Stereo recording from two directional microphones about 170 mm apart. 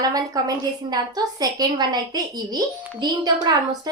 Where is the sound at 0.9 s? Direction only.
20° right (ahead or behind).